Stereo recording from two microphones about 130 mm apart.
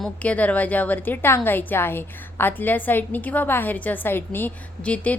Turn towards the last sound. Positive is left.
turn(degrees=10)  # may be behind; listen again after turning